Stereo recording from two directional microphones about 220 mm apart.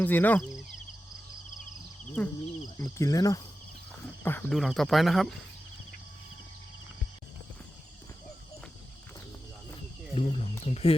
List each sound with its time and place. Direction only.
0.0 s speech: 10° left (ahead or behind)
2.2 s speech: 5° left (ahead or behind)
10.2 s speech: 30° left (ahead or behind)